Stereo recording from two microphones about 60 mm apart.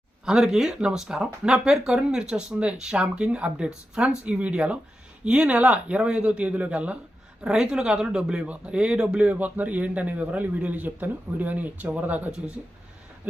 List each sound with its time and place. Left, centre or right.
0.3 s speech: centre